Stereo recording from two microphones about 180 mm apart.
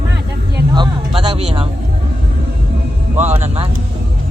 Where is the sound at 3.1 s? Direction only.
40° right (ahead or behind).